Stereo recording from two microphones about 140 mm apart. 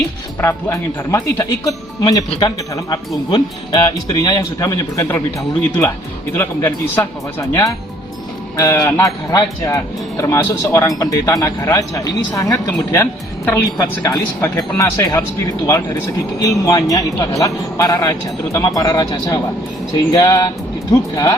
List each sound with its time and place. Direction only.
0.4 s speech: 20° left (ahead or behind)
13.4 s a woman's voice: 15° left (ahead or behind)
16.6 s speech: 25° left (ahead or behind)